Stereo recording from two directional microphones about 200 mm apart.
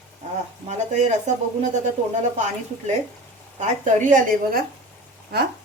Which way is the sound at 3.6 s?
40° right (ahead or behind).